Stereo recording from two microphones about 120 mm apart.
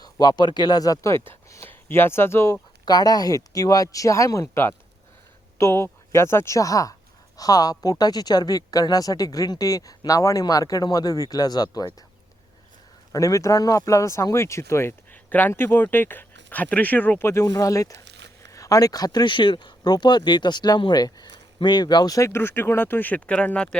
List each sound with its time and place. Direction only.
0.0 s speech: 35° left (ahead or behind)
2.8 s speech: 35° left (ahead or behind)
13.1 s speech: 25° left (ahead or behind); by 23.6 s 10° left (ahead or behind)